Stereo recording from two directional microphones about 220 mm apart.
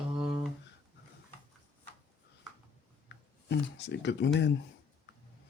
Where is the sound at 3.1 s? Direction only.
55° left (ahead or behind).